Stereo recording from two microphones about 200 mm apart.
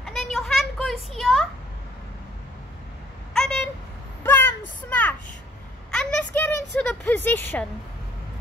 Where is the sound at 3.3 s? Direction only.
5° left (ahead or behind).